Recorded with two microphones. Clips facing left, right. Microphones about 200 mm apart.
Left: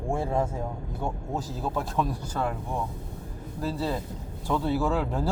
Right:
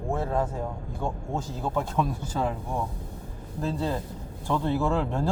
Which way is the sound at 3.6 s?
10° left (ahead or behind).